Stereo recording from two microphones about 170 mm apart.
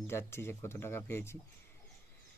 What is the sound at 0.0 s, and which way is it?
Speech, 15° left (ahead or behind).